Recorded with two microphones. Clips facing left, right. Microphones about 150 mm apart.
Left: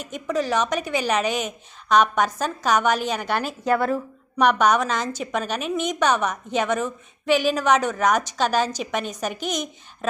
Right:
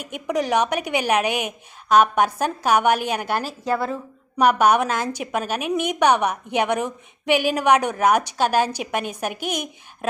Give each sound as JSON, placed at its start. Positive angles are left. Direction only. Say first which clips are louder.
{"t": 0.0, "sound": "a woman's voice", "louder": "right 1 dB", "side_deg": -15}
{"t": 3.7, "sound": "a woman's voice", "louder": "left 3 dB", "side_deg": -25}
{"t": 3.9, "sound": "a woman's voice", "louder": "left 1 dB", "side_deg": -5}